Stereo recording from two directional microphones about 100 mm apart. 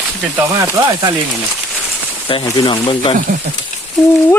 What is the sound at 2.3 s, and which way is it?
Speech, 60° left (ahead or behind).